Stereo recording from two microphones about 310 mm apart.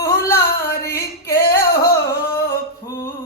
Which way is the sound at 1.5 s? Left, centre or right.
Left.